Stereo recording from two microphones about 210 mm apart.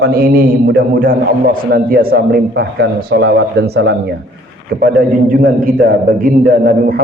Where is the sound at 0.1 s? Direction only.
45° right (ahead or behind).